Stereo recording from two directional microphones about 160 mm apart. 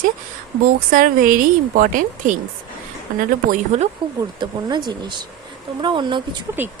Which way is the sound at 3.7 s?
45° right (ahead or behind).